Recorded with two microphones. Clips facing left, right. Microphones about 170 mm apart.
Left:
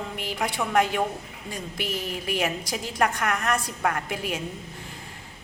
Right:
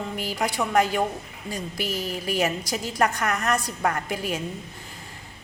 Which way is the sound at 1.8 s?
35° right (ahead or behind).